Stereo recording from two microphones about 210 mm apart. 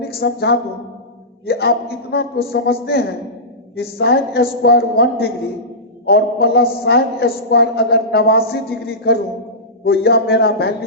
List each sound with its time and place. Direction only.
0.0 s a woman's voice: 50° left (ahead or behind)